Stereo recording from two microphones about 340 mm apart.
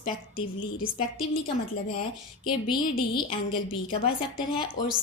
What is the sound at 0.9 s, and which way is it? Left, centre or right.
A woman's voice, centre.